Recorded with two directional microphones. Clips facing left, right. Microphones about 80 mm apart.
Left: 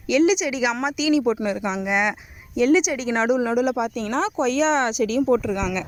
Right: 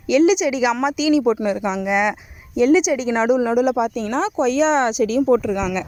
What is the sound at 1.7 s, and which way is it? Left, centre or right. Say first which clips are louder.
Speech: right 3 dB; centre.